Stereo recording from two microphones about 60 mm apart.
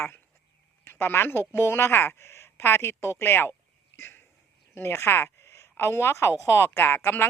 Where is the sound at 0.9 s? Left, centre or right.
Left.